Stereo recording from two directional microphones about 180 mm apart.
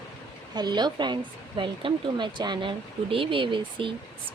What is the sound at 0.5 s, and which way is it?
Speech, 25° right (ahead or behind).